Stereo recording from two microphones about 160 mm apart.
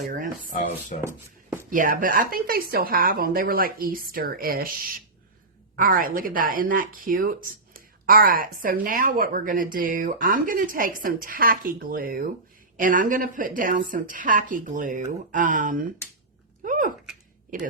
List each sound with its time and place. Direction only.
0.9 s speech: 50° left (ahead or behind)
1.7 s speech: 55° right (ahead or behind)
16.6 s a sound: 55° right (ahead or behind)